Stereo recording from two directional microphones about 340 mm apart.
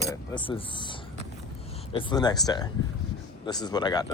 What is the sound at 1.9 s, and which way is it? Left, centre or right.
Speech, centre.